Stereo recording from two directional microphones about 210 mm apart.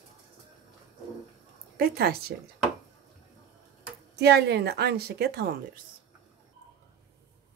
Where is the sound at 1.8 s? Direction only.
50° right (ahead or behind).